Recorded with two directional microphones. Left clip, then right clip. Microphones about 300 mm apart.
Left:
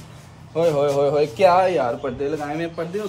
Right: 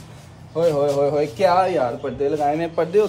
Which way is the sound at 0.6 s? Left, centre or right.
Left.